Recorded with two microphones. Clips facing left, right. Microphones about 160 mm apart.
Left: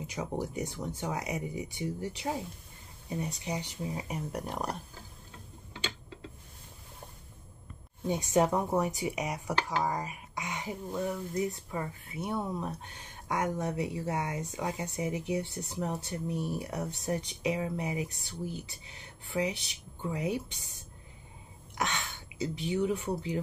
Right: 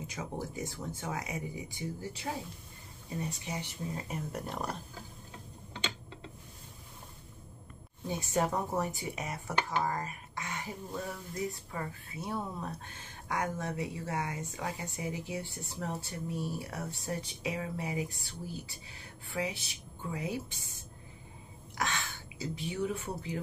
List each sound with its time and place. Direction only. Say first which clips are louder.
0.1 s speech: left 6 dB; 20° left (ahead or behind)
3.2 s speech: left 2 dB; 15° left (ahead or behind)
8.1 s speech: left 5 dB; 20° left (ahead or behind)
21.7 s speech: left 1 dB; 20° left (ahead or behind)